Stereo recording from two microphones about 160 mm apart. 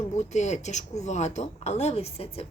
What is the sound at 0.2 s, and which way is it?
A woman's voice, 45° left (ahead or behind).